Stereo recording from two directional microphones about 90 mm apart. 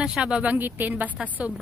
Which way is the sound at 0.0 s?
10° right (ahead or behind).